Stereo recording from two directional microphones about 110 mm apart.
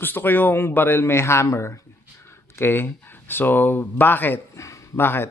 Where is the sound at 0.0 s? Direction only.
20° left (ahead or behind).